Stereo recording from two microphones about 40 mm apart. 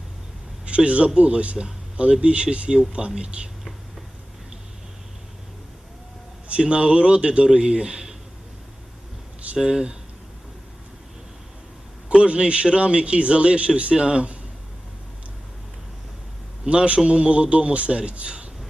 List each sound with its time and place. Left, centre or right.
0.9 s speech: right
6.5 s speech: right
9.6 s speech: centre
12.0 s speech: right
16.6 s speech: right